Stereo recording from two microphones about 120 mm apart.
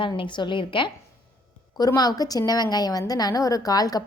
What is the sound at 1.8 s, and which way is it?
A woman's voice, 30° left (ahead or behind).